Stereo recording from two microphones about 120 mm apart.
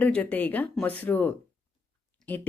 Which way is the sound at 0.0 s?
15° left (ahead or behind).